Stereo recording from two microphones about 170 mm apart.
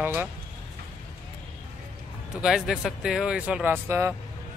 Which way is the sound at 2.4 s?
Centre (ahead or behind).